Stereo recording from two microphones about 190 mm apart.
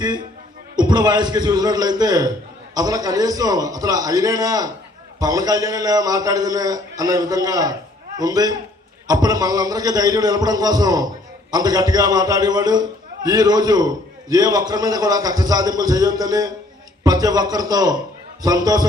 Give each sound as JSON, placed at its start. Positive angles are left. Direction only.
{"t": 0.8, "sound": "a man's voice", "side_deg": -25}